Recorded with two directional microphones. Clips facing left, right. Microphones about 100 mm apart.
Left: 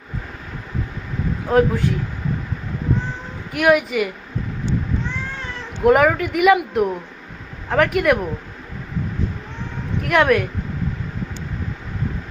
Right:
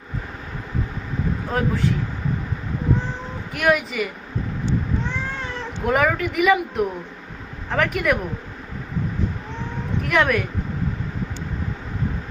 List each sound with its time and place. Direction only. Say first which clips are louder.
1.5 s a man's voice: left 9 dB; 5° left (ahead or behind)
3.5 s speech: left 4 dB; 5° left (ahead or behind)
5.8 s speech: left 6 dB; 5° left (ahead or behind)
10.0 s speech: left 4 dB; centre (ahead or behind)